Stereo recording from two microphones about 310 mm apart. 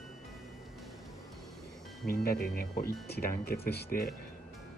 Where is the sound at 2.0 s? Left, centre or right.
Left.